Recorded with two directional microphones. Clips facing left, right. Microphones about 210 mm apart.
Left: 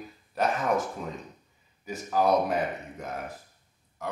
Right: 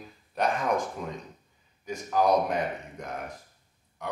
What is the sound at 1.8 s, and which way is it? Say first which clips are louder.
A man's voice: even; 5° left (ahead or behind).